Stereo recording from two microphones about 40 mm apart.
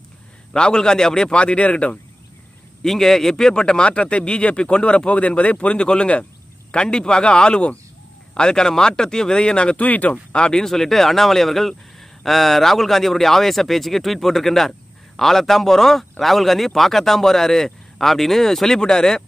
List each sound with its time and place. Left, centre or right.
0.5 s speech: centre
1.3 s a man's voice: left
2.8 s a man's voice: centre; by 9.8 s left
9.8 s speech: left
10.3 s a man's voice: left
10.7 s speech: centre